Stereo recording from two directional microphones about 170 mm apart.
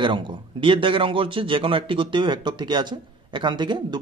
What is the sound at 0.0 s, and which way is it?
Speech, 25° right (ahead or behind).